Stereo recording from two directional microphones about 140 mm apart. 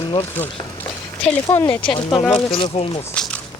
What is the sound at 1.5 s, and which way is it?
Speech, 20° left (ahead or behind).